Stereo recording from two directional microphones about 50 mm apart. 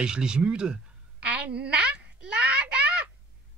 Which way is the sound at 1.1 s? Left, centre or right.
Right.